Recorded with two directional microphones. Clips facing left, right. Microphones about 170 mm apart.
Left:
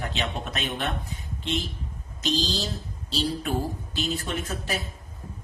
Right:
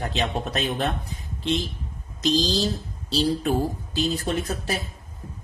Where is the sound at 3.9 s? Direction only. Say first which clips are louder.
Right 5 dB; 35° right (ahead or behind).